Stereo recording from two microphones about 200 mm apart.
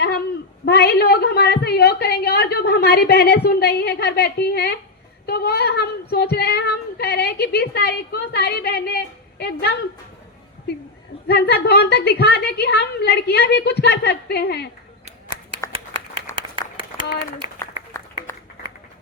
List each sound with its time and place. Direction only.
0.6 s a woman's voice: 55° left (ahead or behind)
11.3 s a woman's voice: 55° left (ahead or behind)
15.6 s clapping: 15° left (ahead or behind)
16.3 s applause: 15° left (ahead or behind)